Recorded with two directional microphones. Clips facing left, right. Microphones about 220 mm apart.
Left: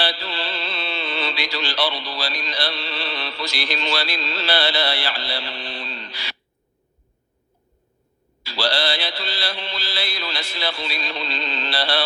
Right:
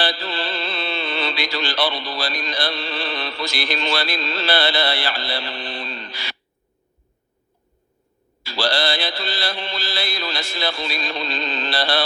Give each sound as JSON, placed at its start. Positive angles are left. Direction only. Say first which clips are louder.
{"t": 0.0, "sound": "speech", "louder": "right 2 dB", "side_deg": -50}
{"t": 8.4, "sound": "mantra", "louder": "right 2 dB", "side_deg": -50}